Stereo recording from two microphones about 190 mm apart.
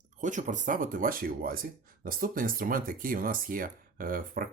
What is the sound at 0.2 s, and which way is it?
Speech, 40° right (ahead or behind).